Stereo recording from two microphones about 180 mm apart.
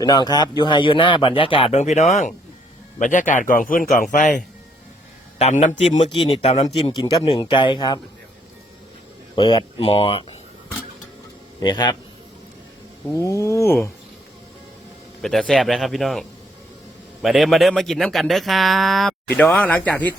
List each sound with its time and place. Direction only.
0.0 s a man's voice: 20° left (ahead or behind)
9.3 s speech: 25° left (ahead or behind)
11.6 s speech: 25° left (ahead or behind)
13.1 s speech: 15° left (ahead or behind)
15.2 s speech: centre (ahead or behind)
17.2 s speech: centre (ahead or behind)